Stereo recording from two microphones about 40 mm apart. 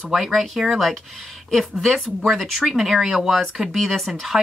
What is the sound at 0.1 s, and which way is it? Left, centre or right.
Speech, centre.